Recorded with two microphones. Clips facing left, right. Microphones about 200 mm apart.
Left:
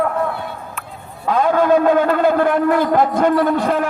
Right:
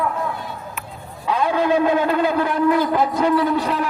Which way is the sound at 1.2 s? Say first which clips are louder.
Left 4 dB; 50° left (ahead or behind).